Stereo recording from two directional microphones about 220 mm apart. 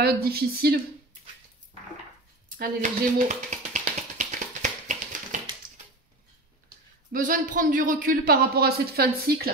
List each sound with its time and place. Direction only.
0.0 s speech: 45° right (ahead or behind)
2.5 s finger snapping: 35° right (ahead or behind)
7.1 s a man's voice: 40° right (ahead or behind)